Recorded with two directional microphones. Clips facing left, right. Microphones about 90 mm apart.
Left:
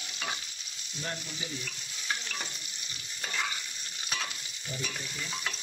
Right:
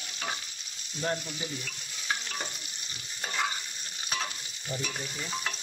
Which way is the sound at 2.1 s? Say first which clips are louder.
Right 2 dB; 35° right (ahead or behind).